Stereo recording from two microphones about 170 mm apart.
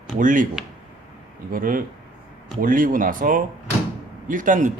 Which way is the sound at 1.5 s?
55° right (ahead or behind).